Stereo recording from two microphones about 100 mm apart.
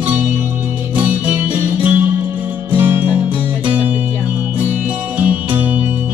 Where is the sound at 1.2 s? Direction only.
15° right (ahead or behind).